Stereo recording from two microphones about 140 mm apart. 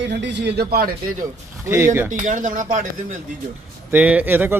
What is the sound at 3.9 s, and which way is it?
Speech, 10° right (ahead or behind).